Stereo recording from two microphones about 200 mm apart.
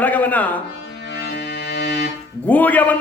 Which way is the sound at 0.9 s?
55° left (ahead or behind).